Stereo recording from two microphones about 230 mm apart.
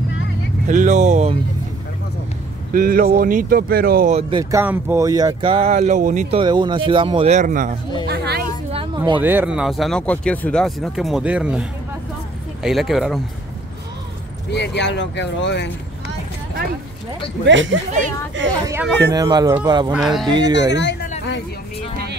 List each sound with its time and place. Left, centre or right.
0.7 s speech: right
2.7 s speech: right
6.4 s speech: centre; by 7.7 s right
8.1 s a sound: right
8.7 s a sound: right
9.2 s speech: centre
12.6 s speech: centre
14.5 s speech: left
17.5 s speech: right
19.1 s speech: centre
19.9 s speech: centre
20.2 s speech: centre
20.7 s speech: left